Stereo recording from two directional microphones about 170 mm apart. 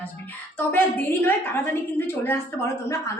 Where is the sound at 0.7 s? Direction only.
10° left (ahead or behind).